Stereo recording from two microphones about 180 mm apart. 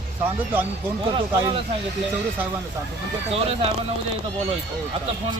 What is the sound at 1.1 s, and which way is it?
Speech, 30° right (ahead or behind).